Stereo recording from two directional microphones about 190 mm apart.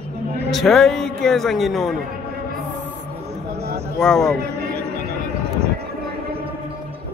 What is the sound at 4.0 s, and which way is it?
Speech, 5° left (ahead or behind).